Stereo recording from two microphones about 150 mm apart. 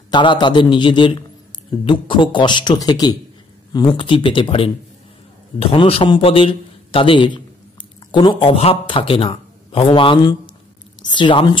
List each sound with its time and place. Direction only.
0.1 s a man's voice: 30° left (ahead or behind)